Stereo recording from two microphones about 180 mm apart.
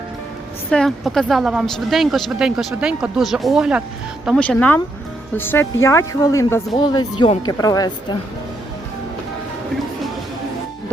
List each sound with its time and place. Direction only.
0.7 s a woman's voice: 5° left (ahead or behind)
4.4 s speech: 10° left (ahead or behind)